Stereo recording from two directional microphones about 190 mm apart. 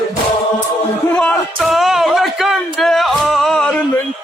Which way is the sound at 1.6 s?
Centre (ahead or behind).